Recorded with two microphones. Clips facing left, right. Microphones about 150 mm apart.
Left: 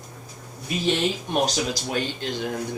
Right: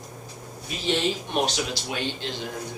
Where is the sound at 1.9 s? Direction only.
45° left (ahead or behind).